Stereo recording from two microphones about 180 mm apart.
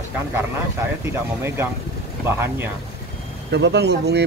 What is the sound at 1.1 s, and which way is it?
Speech, 15° right (ahead or behind).